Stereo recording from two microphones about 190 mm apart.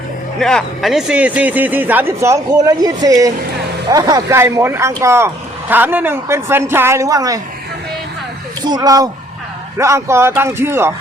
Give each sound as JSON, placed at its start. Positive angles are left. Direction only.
{"t": 0.3, "sound": "speech", "side_deg": 0}
{"t": 8.6, "sound": "speech", "side_deg": -20}